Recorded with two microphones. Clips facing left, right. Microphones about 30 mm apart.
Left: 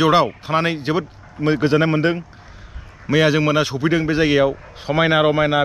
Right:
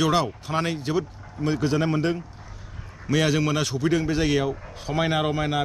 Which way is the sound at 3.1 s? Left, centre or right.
Left.